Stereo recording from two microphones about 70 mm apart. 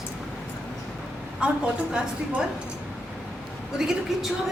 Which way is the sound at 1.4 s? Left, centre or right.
Centre.